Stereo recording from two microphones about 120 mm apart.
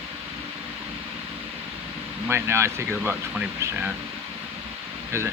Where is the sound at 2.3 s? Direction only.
20° right (ahead or behind).